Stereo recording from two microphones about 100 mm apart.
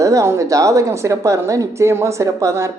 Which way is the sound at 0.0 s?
35° right (ahead or behind).